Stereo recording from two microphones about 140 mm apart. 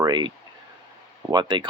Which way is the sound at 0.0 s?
35° right (ahead or behind).